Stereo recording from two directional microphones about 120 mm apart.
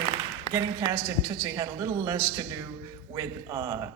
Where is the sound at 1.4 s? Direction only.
30° right (ahead or behind).